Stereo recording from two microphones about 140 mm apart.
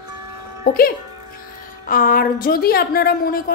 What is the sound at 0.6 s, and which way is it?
A woman's voice, 90° left.